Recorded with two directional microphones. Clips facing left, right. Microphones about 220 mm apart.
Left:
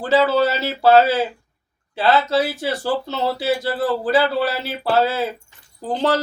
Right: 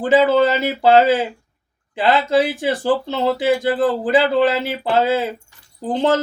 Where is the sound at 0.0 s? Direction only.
15° right (ahead or behind).